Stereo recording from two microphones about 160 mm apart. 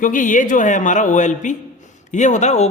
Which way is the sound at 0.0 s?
55° left (ahead or behind).